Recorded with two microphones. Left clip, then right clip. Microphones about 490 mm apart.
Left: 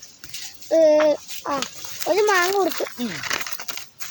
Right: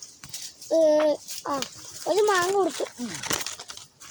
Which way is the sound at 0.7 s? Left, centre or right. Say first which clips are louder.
Left 5 dB; right.